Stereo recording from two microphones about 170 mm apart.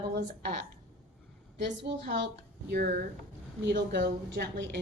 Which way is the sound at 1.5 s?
90° right.